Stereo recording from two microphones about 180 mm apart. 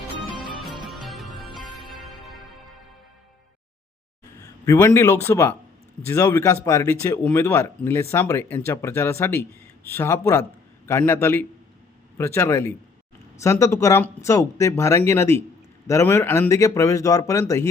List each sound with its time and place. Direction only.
0.9 s music: centre (ahead or behind)
4.4 s a man's voice: 20° left (ahead or behind)